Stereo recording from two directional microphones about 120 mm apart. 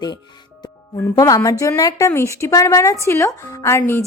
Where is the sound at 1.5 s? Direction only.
25° left (ahead or behind).